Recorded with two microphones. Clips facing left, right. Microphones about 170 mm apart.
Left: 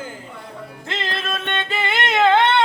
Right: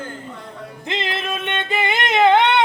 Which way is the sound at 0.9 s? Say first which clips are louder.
Right 2 dB; 20° right (ahead or behind).